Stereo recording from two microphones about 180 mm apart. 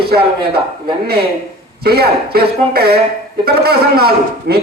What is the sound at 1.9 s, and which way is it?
A man's voice, 60° right (ahead or behind).